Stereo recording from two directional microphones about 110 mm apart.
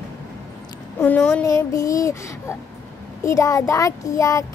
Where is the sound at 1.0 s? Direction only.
15° left (ahead or behind).